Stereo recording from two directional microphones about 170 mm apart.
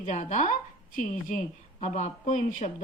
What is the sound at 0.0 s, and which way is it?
Speech, 45° left (ahead or behind).